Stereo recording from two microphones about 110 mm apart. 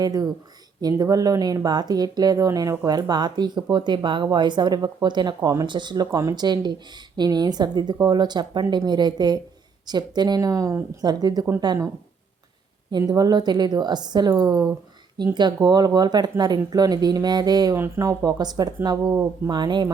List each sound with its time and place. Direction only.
0.0 s speech: 35° right (ahead or behind)
6.1 s speech: 30° right (ahead or behind)
12.9 s speech: 35° right (ahead or behind)
17.7 s speech: 25° right (ahead or behind); by 19.9 s 40° right (ahead or behind)